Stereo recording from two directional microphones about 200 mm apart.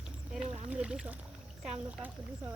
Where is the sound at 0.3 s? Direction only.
5° right (ahead or behind).